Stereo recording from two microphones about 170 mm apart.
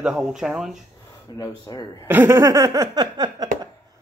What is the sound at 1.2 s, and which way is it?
Speech, 20° left (ahead or behind).